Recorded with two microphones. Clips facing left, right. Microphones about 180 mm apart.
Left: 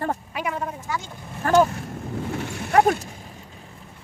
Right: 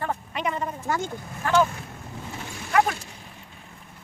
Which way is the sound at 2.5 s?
65° left (ahead or behind).